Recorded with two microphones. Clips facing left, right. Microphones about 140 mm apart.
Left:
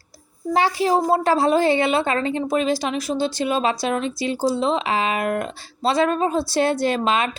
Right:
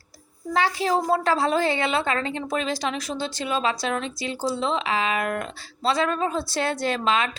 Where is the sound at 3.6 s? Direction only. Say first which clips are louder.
Left 4 dB; 20° left (ahead or behind).